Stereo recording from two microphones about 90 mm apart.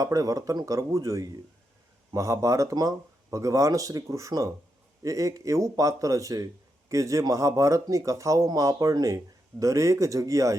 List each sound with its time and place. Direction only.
0.0 s speech: 40° right (ahead or behind)